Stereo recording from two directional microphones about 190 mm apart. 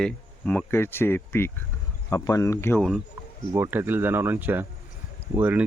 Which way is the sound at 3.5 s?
15° right (ahead or behind).